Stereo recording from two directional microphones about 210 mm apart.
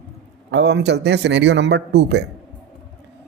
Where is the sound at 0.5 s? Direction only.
55° right (ahead or behind).